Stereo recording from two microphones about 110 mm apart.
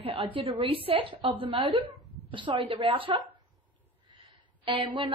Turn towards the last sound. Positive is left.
turn(degrees=-50)  # may be behind; listen again after turning